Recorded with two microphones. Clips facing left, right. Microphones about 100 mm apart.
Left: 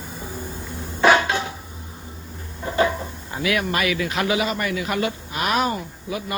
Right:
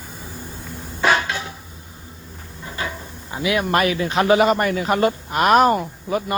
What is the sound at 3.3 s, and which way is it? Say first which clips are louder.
Speech: right 2 dB; 20° right (ahead or behind).